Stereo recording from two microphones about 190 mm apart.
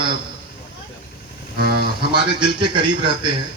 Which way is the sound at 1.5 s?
55° right (ahead or behind).